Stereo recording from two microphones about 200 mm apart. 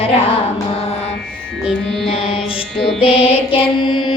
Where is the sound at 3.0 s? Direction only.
30° left (ahead or behind).